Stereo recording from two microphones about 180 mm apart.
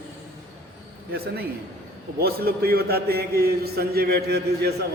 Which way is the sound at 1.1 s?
60° right (ahead or behind).